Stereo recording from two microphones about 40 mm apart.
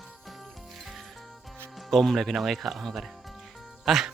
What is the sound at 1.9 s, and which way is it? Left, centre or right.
Speech, centre.